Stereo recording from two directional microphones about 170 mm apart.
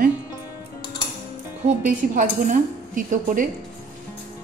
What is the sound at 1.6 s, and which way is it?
A woman's voice, 50° right (ahead or behind).